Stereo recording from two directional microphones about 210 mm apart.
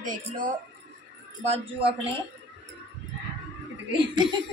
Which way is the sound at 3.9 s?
25° right (ahead or behind).